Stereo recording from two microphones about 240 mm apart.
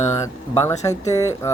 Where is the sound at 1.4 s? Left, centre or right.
Centre.